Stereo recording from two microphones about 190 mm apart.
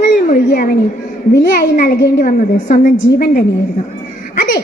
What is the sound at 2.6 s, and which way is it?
Speech, 45° left (ahead or behind).